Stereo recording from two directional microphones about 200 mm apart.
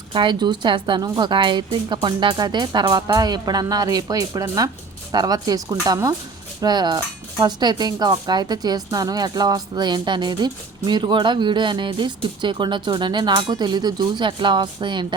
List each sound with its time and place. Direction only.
0.1 s speech: 25° right (ahead or behind)